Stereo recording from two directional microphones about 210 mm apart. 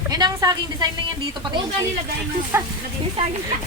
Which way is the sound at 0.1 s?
20° right (ahead or behind).